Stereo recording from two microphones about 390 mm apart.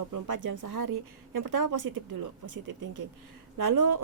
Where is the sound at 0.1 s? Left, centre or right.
Right.